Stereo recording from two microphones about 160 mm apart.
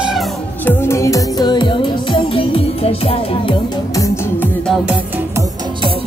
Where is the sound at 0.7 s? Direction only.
15° left (ahead or behind); by 3.6 s 35° left (ahead or behind).